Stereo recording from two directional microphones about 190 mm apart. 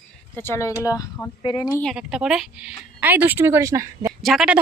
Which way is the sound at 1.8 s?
Centre (ahead or behind).